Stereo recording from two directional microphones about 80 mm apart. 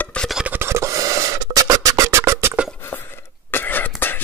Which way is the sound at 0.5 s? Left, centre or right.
Right.